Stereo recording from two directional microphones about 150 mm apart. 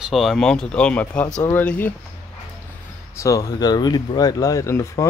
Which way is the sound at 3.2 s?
20° left (ahead or behind).